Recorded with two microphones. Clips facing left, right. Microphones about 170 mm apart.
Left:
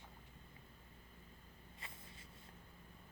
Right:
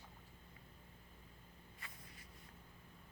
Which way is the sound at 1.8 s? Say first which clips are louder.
Left 2 dB; 25° left (ahead or behind).